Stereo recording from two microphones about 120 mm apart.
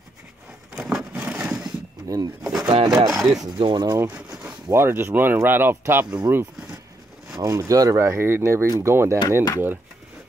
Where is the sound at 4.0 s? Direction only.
15° right (ahead or behind).